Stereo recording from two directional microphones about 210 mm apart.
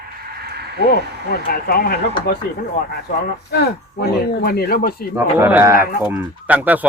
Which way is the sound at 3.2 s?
50° left (ahead or behind).